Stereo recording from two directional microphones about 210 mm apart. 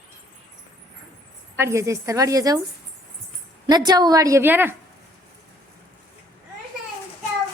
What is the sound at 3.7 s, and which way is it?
A woman's voice, 20° right (ahead or behind).